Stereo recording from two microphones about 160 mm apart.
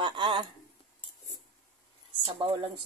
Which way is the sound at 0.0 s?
30° right (ahead or behind).